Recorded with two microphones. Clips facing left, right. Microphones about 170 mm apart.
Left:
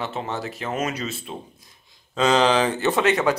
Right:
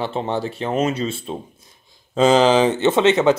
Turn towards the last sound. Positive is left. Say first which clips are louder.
# right 5 dB
turn(degrees=-25)  # may be behind; listen again after turning